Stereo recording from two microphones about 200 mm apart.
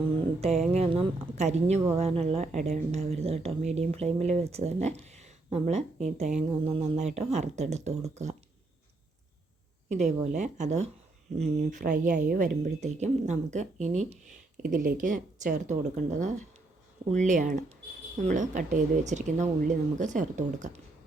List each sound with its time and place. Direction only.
0.2 s mantra: 30° right (ahead or behind)
0.7 s a woman's voice: 30° right (ahead or behind)
9.9 s a woman's voice: 35° right (ahead or behind)